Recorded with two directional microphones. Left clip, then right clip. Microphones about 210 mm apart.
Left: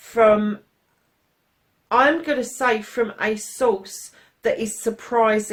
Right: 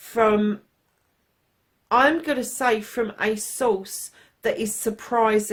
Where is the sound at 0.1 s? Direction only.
45° right (ahead or behind).